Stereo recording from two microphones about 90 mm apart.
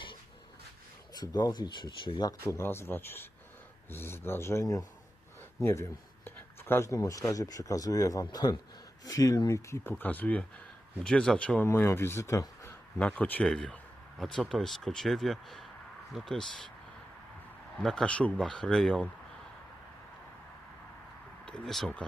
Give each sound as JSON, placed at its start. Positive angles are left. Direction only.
{"t": 1.1, "sound": "speech", "side_deg": 50}
{"t": 2.4, "sound": "speech", "side_deg": 30}
{"t": 9.9, "sound": "speech", "side_deg": 20}
{"t": 11.6, "sound": "speech", "side_deg": 25}
{"t": 13.0, "sound": "speech", "side_deg": 15}
{"t": 13.4, "sound": "speech", "side_deg": 10}
{"t": 17.8, "sound": "speech", "side_deg": 10}
{"t": 21.4, "sound": "speech", "side_deg": 10}